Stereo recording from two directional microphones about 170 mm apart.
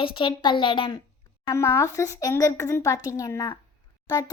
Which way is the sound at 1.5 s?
15° left (ahead or behind).